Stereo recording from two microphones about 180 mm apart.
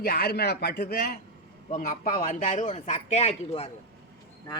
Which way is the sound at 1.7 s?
45° left (ahead or behind).